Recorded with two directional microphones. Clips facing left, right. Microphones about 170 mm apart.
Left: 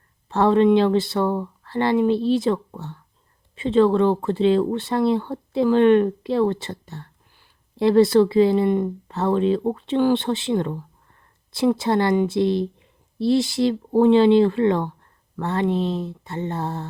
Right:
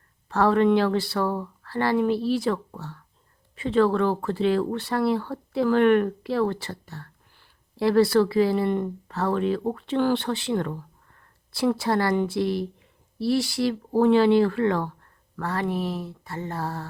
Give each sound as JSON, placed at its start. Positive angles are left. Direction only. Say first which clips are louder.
{"t": 0.3, "sound": "speech", "louder": "left 3 dB", "side_deg": 25}